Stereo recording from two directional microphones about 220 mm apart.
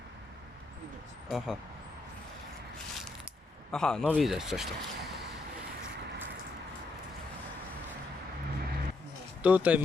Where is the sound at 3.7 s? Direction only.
5° left (ahead or behind).